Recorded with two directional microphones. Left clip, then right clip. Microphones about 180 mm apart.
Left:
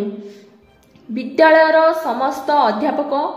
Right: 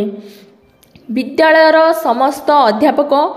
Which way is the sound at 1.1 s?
30° right (ahead or behind).